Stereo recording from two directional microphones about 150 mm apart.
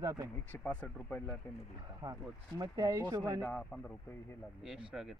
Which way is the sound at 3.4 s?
5° left (ahead or behind).